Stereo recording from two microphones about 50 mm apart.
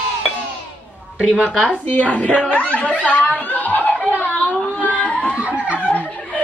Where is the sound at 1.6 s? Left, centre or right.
Left.